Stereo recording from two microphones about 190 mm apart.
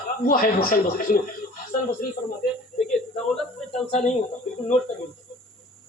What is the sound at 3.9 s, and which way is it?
Speech, 35° left (ahead or behind).